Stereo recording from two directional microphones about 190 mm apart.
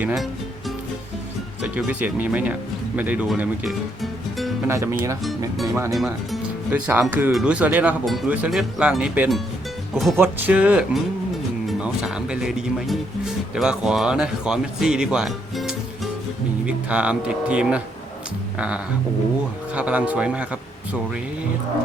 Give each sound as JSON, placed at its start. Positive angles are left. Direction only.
{"t": 0.0, "sound": "speech", "side_deg": 0}
{"t": 1.6, "sound": "speech", "side_deg": -10}
{"t": 4.6, "sound": "speech", "side_deg": -15}
{"t": 5.9, "sound": "speech", "side_deg": 0}
{"t": 19.7, "sound": "speech", "side_deg": -5}